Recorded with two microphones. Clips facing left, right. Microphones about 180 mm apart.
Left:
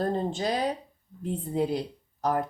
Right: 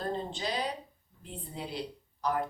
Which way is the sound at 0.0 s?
45° left (ahead or behind).